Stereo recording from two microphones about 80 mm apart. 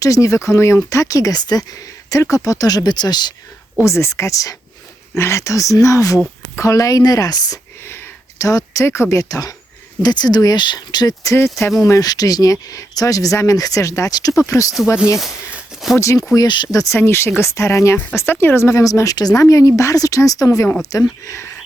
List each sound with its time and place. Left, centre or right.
0.0 s speech: left
3.8 s speech: left
7.9 s a sound: left
8.4 s speech: left
10.0 s speech: left
16.0 s speech: left
16.3 s speech: left
16.7 s speech: left